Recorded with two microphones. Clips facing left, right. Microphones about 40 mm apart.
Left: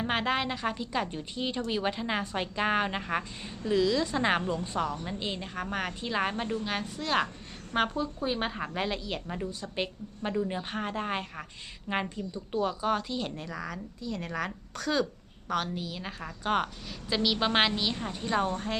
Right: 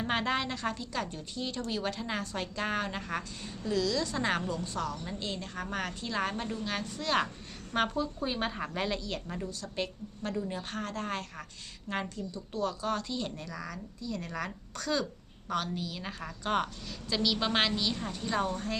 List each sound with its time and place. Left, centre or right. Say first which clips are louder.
0.0 s a woman's voice: left 2 dB; centre
17.1 s a woman's voice: left 2 dB; left